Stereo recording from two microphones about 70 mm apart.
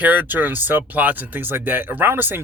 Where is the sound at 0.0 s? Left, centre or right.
Right.